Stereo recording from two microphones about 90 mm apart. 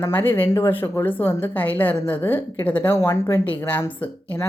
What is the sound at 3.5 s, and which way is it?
Speech, 20° left (ahead or behind).